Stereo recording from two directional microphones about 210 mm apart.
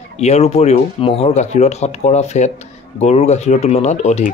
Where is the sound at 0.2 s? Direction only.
30° left (ahead or behind).